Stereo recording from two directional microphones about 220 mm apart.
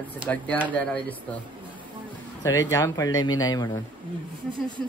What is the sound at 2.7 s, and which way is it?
Speech, 15° left (ahead or behind).